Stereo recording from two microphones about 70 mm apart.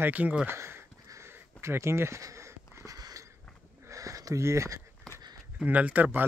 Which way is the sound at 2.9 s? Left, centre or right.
Right.